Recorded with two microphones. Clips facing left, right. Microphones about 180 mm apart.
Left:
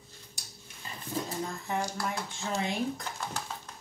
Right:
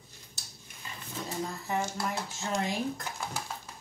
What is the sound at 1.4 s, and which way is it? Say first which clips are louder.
Speech: right 1 dB; centre (ahead or behind).